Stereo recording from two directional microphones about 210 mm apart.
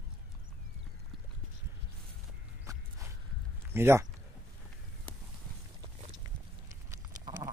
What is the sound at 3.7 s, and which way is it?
Speech, 10° right (ahead or behind).